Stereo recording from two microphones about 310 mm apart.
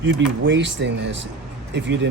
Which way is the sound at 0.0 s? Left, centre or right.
Right.